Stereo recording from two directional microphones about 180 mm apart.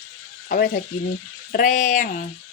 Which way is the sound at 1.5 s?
45° left (ahead or behind).